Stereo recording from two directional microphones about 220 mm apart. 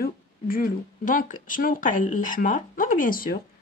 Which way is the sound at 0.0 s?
40° left (ahead or behind).